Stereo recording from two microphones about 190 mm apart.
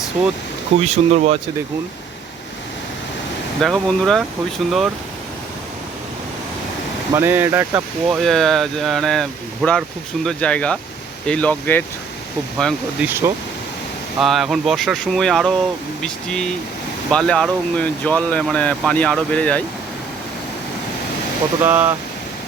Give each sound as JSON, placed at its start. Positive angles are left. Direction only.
{"t": 0.9, "sound": "speech", "side_deg": -35}
{"t": 3.6, "sound": "speech", "side_deg": 0}
{"t": 7.1, "sound": "speech", "side_deg": -10}
{"t": 8.2, "sound": "speech", "side_deg": 0}
{"t": 13.1, "sound": "speech", "side_deg": -10}
{"t": 14.2, "sound": "speech", "side_deg": 0}
{"t": 21.6, "sound": "speech", "side_deg": -10}